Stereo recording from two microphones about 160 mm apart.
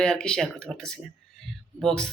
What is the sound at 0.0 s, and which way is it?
Speech, 5° left (ahead or behind).